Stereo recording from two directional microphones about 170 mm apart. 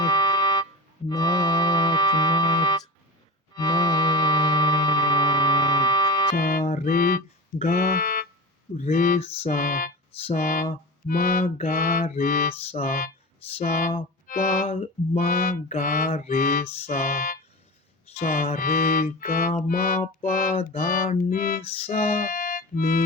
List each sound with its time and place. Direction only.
0.0 s music: 25° left (ahead or behind)
6.3 s music: 60° left (ahead or behind)
7.7 s speech: 60° left (ahead or behind)
11.0 s music: 55° left (ahead or behind)
13.7 s speech: 55° left (ahead or behind)
14.7 s music: 40° left (ahead or behind)
21.6 s music: 35° left (ahead or behind)
21.9 s speech: 55° left (ahead or behind)